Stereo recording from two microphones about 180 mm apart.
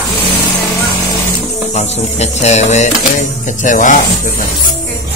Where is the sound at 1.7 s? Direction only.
35° left (ahead or behind).